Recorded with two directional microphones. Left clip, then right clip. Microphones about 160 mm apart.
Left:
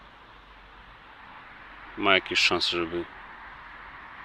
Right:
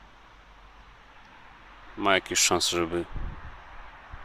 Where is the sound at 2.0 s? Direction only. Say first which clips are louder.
Left 2 dB; 20° right (ahead or behind).